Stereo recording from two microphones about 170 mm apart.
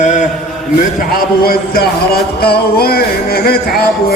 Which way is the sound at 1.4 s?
65° left (ahead or behind).